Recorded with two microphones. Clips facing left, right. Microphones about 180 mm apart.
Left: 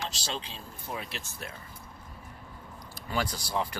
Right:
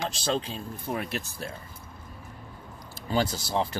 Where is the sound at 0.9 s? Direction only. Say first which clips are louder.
Right 6 dB; 60° right (ahead or behind).